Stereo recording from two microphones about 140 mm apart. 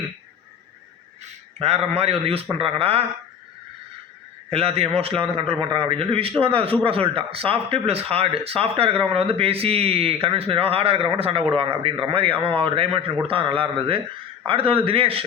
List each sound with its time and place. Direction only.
1.5 s a man's voice: 50° right (ahead or behind)
4.5 s a man's voice: 45° right (ahead or behind)